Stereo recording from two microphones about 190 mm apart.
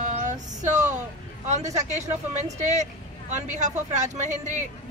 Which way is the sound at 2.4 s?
40° right (ahead or behind).